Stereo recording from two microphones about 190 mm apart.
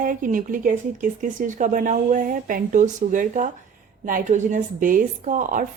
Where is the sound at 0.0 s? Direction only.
45° right (ahead or behind).